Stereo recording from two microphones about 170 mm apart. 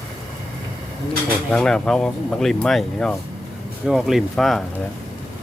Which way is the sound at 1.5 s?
5° left (ahead or behind).